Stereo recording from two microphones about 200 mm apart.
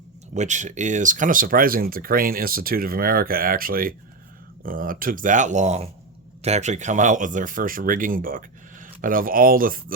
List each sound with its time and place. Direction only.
0.3 s speech: 35° right (ahead or behind)